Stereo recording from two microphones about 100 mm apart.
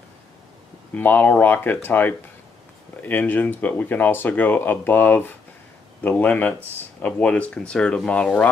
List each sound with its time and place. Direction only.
0.9 s speech: 20° left (ahead or behind)